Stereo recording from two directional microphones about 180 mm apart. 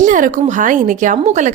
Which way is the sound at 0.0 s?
45° right (ahead or behind).